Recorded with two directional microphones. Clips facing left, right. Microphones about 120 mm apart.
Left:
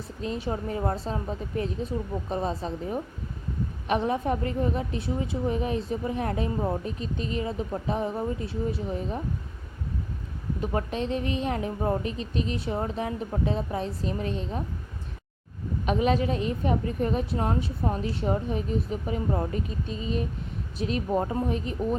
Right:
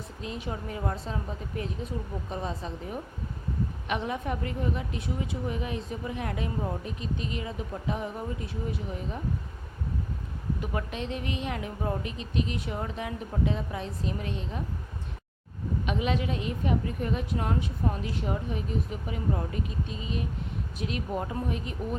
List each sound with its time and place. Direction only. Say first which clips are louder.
0.2 s a woman's voice: left 6 dB; 35° left (ahead or behind)
10.6 s a woman's voice: left 7 dB; 35° left (ahead or behind)
15.9 s a woman's voice: left 6 dB; 40° left (ahead or behind)